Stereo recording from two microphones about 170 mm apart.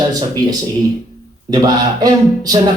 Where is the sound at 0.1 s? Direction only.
20° right (ahead or behind).